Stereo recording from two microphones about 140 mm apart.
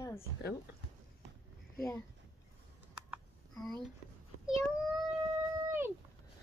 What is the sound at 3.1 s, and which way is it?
Typing, centre (ahead or behind).